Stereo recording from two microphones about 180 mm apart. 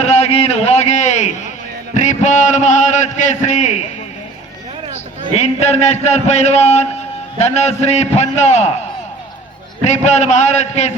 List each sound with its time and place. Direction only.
0.0 s a man's voice: 35° left (ahead or behind)
5.3 s a man's voice: 40° left (ahead or behind)
9.8 s a man's voice: 40° left (ahead or behind)